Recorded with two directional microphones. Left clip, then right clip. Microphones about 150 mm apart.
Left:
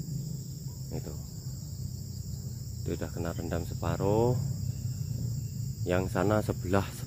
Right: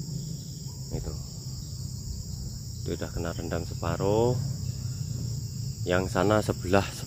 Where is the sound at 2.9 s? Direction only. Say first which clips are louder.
Right 2 dB; 10° left (ahead or behind).